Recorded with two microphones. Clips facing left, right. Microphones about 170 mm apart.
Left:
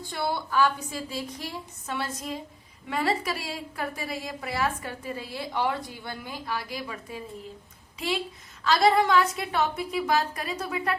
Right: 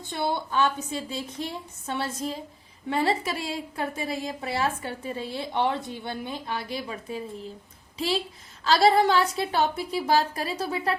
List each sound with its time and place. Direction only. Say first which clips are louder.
0.0 s a woman's voice: right 2 dB; 20° right (ahead or behind)